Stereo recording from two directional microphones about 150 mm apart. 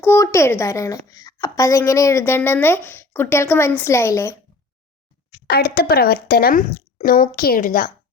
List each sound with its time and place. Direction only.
0.0 s a woman's voice: 15° left (ahead or behind)
5.5 s speech: 90° left; by 7.9 s 65° left (ahead or behind)